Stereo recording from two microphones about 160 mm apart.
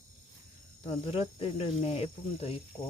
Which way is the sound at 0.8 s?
40° left (ahead or behind).